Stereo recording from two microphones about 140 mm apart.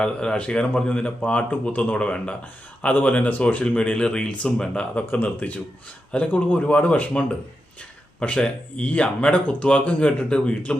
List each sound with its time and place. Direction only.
0.0 s speech: 5° left (ahead or behind)